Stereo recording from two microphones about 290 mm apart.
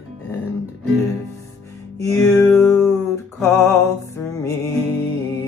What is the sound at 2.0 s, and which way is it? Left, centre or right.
Music, centre.